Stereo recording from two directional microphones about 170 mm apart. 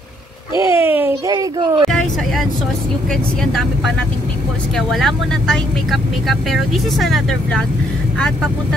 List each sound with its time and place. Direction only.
0.6 s a sound: 15° right (ahead or behind)
1.3 s speech: 25° right (ahead or behind)
1.9 s vehicle: centre (ahead or behind)
4.7 s speech: centre (ahead or behind)